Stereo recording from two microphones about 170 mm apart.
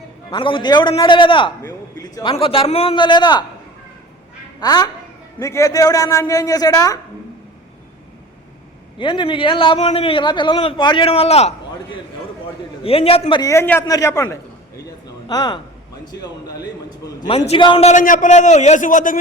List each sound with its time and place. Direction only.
0.3 s a woman's voice: 30° left (ahead or behind)
2.3 s a man's voice: 30° left (ahead or behind)
4.6 s a woman's voice: 25° left (ahead or behind)
9.0 s a man's voice: 30° left (ahead or behind)
12.8 s a man's voice: 35° left (ahead or behind)
13.4 s a man's voice: 15° left (ahead or behind)
14.8 s a sound: 20° left (ahead or behind)
16.2 s a woman's voice: 20° left (ahead or behind)
17.2 s a man's voice: 35° left (ahead or behind)